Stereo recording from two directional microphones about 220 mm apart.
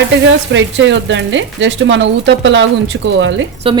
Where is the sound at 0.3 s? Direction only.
55° right (ahead or behind).